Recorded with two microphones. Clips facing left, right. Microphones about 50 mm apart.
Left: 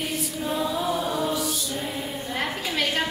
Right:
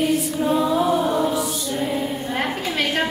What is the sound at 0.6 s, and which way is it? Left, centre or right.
Music, right.